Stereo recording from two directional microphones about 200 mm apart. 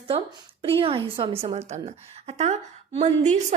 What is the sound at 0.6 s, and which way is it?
A woman's voice, 25° right (ahead or behind).